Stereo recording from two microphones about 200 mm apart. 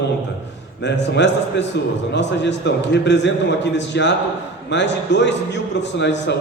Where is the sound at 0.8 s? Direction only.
60° left (ahead or behind).